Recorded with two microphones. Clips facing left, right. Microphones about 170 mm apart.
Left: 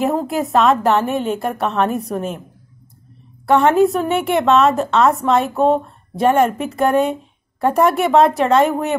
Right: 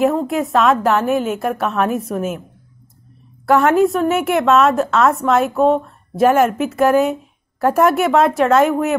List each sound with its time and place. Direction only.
0.0 s a woman's voice: centre (ahead or behind)
3.4 s a woman's voice: centre (ahead or behind)